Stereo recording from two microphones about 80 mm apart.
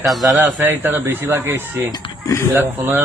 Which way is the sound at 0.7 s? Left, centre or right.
Right.